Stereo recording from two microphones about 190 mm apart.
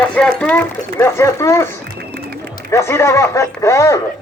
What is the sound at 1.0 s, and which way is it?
Speech, 15° left (ahead or behind).